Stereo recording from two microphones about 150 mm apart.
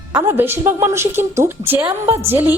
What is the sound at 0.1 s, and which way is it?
A woman's voice, 15° right (ahead or behind).